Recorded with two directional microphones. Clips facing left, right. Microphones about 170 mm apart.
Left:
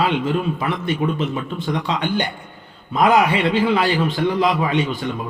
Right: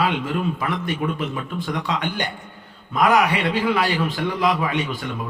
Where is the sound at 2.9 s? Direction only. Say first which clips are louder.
Left 2 dB; 25° left (ahead or behind).